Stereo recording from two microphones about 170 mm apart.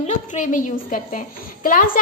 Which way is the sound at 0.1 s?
45° left (ahead or behind).